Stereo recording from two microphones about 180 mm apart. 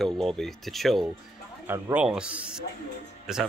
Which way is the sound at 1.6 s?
10° right (ahead or behind).